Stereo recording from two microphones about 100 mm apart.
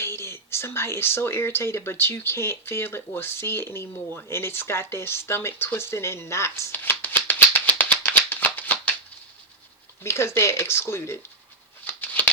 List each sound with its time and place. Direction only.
0.0 s speech: 25° left (ahead or behind)
10.0 s speech: 25° left (ahead or behind)
11.9 s a sound: 20° left (ahead or behind)